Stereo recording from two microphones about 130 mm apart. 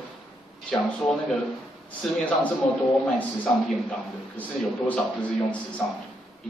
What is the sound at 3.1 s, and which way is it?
A man's voice, centre (ahead or behind).